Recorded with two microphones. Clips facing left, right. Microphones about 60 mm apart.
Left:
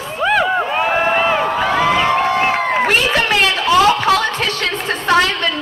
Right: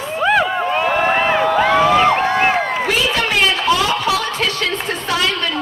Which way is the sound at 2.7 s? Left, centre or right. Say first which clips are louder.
Left 3 dB; left.